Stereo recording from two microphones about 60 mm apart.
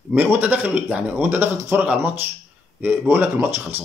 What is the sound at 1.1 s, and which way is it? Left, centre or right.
Speech, right.